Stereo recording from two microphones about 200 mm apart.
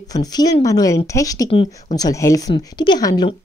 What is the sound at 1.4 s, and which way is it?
Speech, 30° left (ahead or behind).